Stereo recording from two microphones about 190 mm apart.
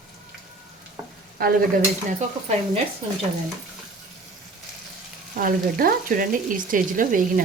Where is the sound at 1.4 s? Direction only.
50° right (ahead or behind).